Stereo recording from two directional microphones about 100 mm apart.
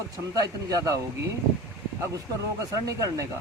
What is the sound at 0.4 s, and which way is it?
Speech, 35° right (ahead or behind).